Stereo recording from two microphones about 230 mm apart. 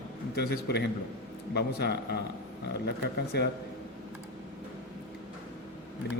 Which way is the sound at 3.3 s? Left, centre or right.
Left.